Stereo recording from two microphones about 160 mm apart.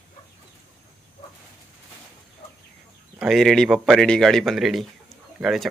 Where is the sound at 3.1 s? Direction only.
Centre (ahead or behind).